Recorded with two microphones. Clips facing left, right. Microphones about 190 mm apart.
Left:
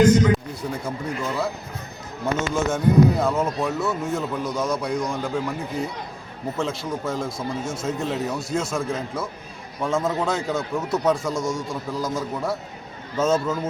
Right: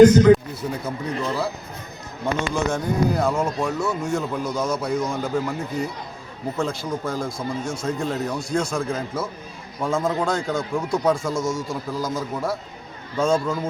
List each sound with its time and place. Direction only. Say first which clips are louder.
0.6 s speech: right 2 dB; centre (ahead or behind)
1.1 s speech: right 4 dB; 35° right (ahead or behind)
2.2 s speech: even; centre (ahead or behind)